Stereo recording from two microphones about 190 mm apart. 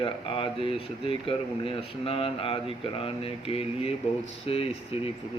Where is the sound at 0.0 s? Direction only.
25° left (ahead or behind).